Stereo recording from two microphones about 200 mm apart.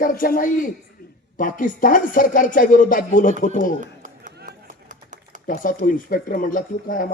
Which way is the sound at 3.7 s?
40° right (ahead or behind).